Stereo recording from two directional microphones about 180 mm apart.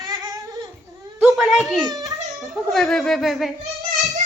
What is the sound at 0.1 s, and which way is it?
Babbling, 20° right (ahead or behind).